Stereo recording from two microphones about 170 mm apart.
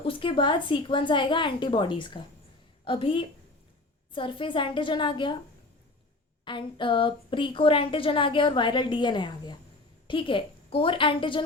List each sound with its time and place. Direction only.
0.0 s a woman's voice: 30° left (ahead or behind)
6.4 s a woman's voice: 30° left (ahead or behind)